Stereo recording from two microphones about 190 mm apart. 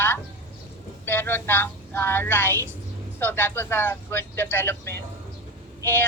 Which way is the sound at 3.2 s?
10° left (ahead or behind).